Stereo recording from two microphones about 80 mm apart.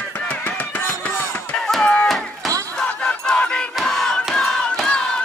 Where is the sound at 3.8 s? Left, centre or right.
Centre.